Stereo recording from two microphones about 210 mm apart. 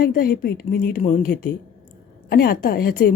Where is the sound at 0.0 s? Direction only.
45° left (ahead or behind).